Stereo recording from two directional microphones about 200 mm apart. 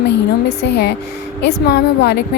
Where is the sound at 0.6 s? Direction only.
55° left (ahead or behind).